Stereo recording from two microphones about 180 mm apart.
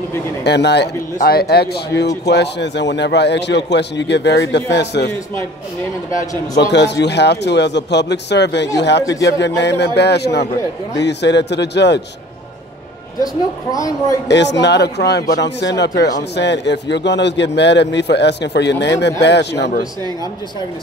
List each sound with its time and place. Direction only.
0.4 s a man's voice: 70° left (ahead or behind)
6.7 s a man's voice: 75° left (ahead or behind)
13.2 s speech: 20° left (ahead or behind)
14.2 s a man's voice: 75° left (ahead or behind)